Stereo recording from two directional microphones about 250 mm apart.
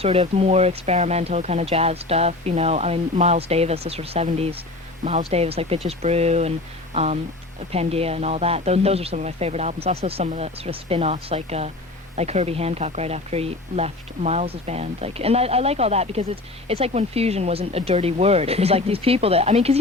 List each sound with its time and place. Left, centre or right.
0.0 s speech: right